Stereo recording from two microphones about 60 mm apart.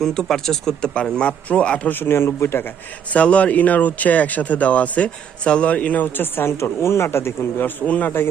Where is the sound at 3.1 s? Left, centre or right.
Left.